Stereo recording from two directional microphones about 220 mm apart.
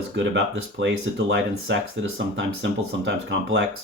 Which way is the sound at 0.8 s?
60° right (ahead or behind).